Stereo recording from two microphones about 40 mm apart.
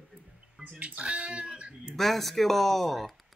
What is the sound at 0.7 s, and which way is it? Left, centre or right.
Speech, right.